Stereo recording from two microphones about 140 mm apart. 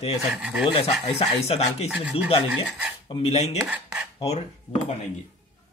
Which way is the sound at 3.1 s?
45° left (ahead or behind).